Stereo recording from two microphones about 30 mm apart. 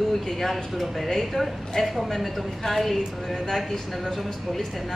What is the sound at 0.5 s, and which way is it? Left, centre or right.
Speech, centre.